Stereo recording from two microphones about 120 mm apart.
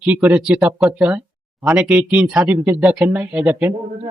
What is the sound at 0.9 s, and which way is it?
A man's voice, 15° right (ahead or behind).